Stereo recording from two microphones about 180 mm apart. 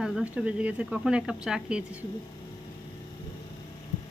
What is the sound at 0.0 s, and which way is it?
Speech, 5° right (ahead or behind).